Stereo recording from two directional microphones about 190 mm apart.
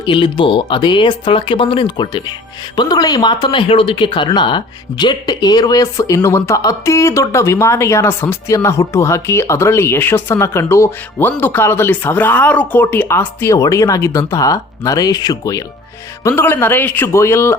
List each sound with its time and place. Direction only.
0.0 s speech: 25° left (ahead or behind)